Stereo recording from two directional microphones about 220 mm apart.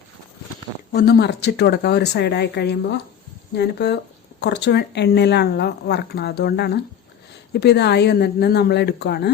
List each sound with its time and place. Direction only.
0.9 s speech: 45° left (ahead or behind)